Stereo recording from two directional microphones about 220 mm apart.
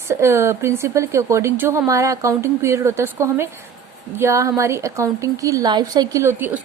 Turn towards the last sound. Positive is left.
turn(degrees=-10)  # may be behind; listen again after turning